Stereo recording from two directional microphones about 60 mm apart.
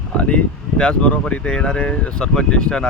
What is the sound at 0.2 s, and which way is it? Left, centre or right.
Speech, centre.